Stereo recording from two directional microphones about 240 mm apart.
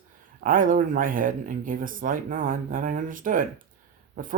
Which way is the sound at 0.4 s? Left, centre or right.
Right.